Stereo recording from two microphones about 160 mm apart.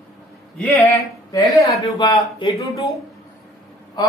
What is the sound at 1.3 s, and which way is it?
Speech, 20° left (ahead or behind).